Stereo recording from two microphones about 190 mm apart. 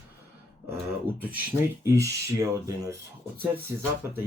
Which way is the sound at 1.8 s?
15° right (ahead or behind).